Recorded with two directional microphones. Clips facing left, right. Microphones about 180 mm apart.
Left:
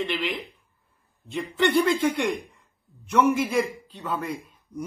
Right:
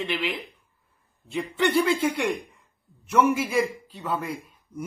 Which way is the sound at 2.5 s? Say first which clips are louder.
Left 1 dB; centre (ahead or behind).